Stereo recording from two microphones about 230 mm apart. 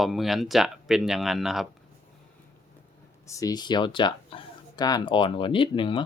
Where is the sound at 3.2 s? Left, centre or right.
Centre.